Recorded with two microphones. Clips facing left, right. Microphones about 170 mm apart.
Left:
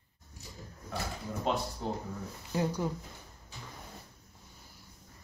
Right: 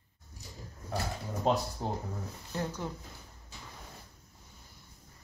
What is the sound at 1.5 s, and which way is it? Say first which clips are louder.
Speech: right 3 dB; 40° right (ahead or behind).